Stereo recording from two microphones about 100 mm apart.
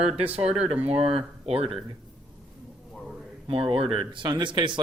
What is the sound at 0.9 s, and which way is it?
Speech, 75° right (ahead or behind).